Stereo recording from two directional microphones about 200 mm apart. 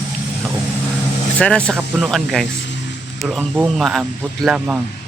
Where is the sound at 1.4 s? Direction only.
5° left (ahead or behind).